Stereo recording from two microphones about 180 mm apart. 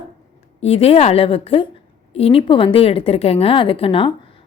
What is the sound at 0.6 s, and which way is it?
A woman's voice, 35° left (ahead or behind).